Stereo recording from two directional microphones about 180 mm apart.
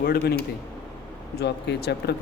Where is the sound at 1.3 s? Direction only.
65° left (ahead or behind).